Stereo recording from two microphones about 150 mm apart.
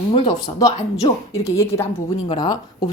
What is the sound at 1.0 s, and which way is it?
A woman's voice, 20° left (ahead or behind).